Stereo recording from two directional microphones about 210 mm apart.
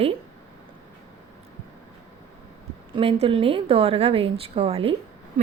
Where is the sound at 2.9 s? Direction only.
25° right (ahead or behind).